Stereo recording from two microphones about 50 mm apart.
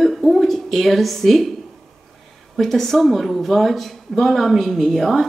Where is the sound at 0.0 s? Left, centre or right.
Centre.